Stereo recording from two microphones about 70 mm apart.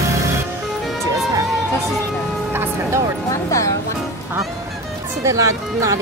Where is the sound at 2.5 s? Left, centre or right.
Right.